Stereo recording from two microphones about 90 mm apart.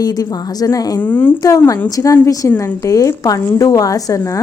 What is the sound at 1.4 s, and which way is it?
A woman's voice, 40° left (ahead or behind).